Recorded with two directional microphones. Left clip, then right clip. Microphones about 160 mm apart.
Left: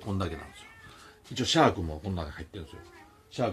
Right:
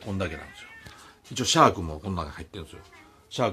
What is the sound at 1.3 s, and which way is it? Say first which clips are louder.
Speech: right 4 dB; 25° right (ahead or behind).